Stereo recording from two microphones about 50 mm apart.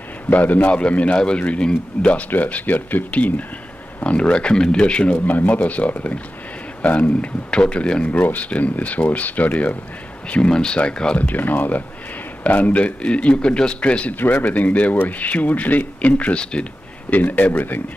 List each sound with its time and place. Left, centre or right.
0.3 s a man's voice: left
2.3 s a man's voice: left
5.2 s a man's voice: left
8.2 s a man's voice: left
11.1 s a man's voice: left
14.1 s speech: left
17.1 s speech: left